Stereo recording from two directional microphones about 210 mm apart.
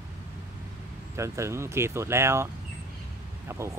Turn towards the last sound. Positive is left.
turn(degrees=-10)  # may be behind; listen again after turning